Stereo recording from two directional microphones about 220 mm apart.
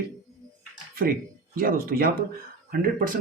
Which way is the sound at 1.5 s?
40° right (ahead or behind).